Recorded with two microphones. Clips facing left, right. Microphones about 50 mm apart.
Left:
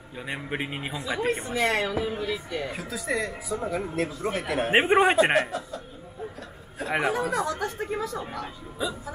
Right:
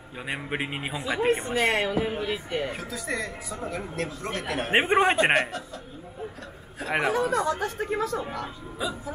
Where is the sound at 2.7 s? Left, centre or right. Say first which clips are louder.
Left 1 dB; centre.